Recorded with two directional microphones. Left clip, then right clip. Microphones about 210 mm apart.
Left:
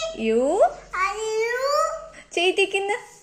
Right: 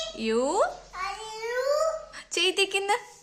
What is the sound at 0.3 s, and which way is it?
Speech, centre (ahead or behind).